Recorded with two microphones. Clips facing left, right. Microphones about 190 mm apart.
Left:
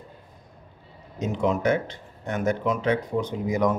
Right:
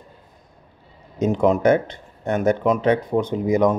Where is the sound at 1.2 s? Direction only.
50° right (ahead or behind).